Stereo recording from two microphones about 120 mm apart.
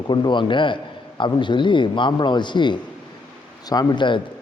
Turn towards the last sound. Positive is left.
turn(degrees=40)  # may be behind; listen again after turning